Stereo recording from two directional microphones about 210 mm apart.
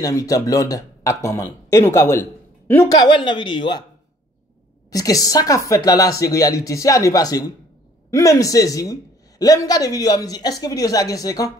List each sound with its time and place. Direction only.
0.0 s a woman's voice: 15° left (ahead or behind)
4.9 s a woman's voice: 15° left (ahead or behind)